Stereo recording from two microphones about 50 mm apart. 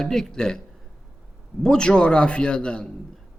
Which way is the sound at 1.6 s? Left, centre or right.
Centre.